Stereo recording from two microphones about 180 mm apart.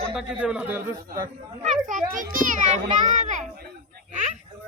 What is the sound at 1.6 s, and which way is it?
A child's voice, 45° right (ahead or behind).